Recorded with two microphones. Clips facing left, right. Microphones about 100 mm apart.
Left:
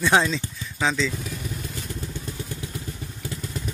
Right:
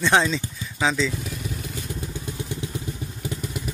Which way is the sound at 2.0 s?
15° right (ahead or behind).